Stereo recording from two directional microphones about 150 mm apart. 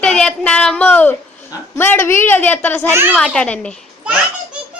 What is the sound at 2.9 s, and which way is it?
Speech, 15° right (ahead or behind).